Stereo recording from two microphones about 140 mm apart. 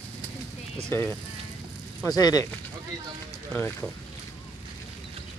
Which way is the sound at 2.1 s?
30° left (ahead or behind).